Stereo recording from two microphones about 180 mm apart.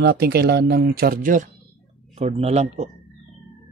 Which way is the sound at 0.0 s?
60° right (ahead or behind).